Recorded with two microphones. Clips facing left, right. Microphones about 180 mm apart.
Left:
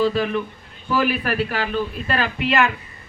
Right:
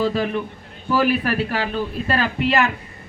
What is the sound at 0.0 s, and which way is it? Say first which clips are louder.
A man's voice: left 1 dB; 45° right (ahead or behind).